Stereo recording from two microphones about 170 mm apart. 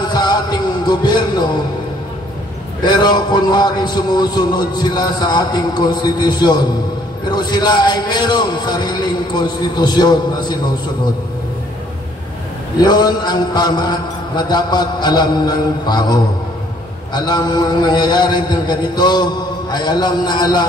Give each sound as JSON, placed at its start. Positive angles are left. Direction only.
{"t": 0.0, "sound": "music", "side_deg": 25}
{"t": 2.8, "sound": "a man's voice", "side_deg": 25}
{"t": 12.8, "sound": "a man's voice", "side_deg": 25}